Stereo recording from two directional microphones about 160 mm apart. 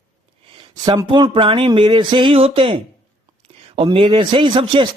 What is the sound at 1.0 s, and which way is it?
Speech, 30° right (ahead or behind).